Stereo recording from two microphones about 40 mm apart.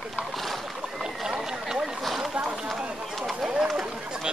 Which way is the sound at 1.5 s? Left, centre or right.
Centre.